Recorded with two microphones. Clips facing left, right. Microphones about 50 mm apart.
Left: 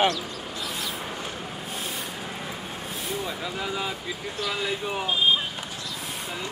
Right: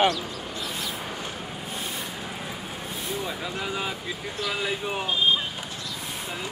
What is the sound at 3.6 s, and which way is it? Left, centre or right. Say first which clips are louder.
Speech: even; centre.